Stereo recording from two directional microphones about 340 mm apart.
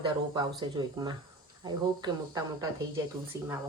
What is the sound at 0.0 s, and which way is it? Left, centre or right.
Speech, centre.